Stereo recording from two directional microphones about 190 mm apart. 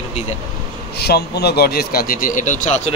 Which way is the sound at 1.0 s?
60° left (ahead or behind).